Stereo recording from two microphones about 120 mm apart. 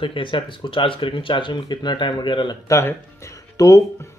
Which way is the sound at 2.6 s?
25° left (ahead or behind).